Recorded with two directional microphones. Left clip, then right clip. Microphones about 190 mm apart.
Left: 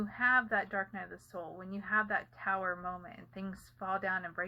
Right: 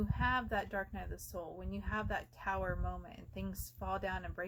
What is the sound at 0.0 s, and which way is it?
Speech, 35° right (ahead or behind).